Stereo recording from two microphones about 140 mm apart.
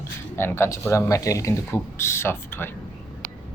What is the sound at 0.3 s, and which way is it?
Speech, 15° left (ahead or behind).